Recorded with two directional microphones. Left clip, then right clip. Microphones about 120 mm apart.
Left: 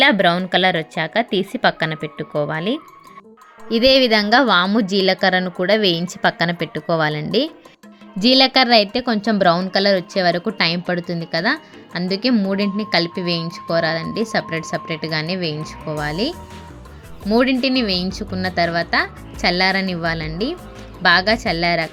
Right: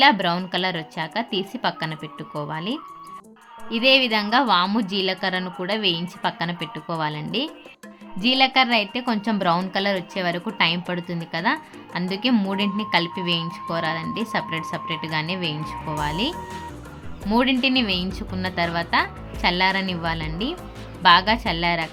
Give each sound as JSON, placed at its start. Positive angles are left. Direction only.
{"t": 0.0, "sound": "a woman's voice", "side_deg": 40}
{"t": 3.7, "sound": "a woman's voice", "side_deg": 55}
{"t": 4.6, "sound": "speech", "side_deg": 35}
{"t": 4.9, "sound": "a woman's voice", "side_deg": 55}
{"t": 17.3, "sound": "speech", "side_deg": 35}